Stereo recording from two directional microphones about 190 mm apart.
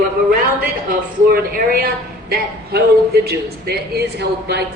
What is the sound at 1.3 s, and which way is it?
Speech, 50° right (ahead or behind).